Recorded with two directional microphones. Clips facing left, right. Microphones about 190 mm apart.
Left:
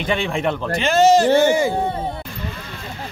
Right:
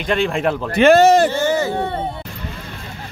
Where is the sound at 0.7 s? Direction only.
60° right (ahead or behind).